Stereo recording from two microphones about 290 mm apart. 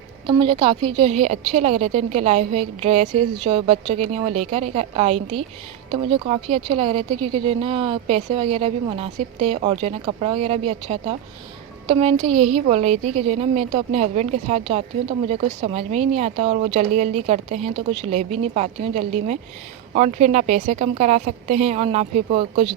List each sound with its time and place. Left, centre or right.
0.3 s a woman's voice: centre